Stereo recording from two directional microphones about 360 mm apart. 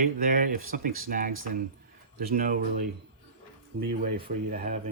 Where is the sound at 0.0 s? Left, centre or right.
Right.